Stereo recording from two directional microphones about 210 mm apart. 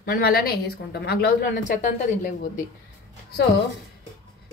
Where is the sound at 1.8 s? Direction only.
35° left (ahead or behind).